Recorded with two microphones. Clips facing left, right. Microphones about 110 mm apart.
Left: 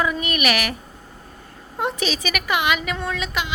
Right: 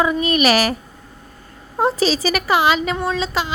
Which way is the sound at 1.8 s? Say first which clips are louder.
Right 7 dB; 35° right (ahead or behind).